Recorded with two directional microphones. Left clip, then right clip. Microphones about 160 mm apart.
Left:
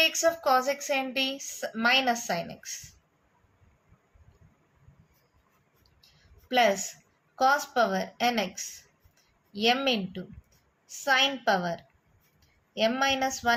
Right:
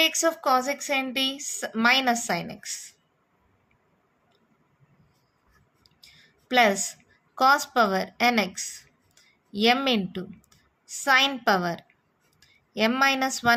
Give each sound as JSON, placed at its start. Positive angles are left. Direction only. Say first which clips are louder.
{"t": 0.0, "sound": "a woman's voice", "louder": "right 1 dB", "side_deg": -45}
{"t": 6.5, "sound": "a woman's voice", "louder": "right 3 dB", "side_deg": -45}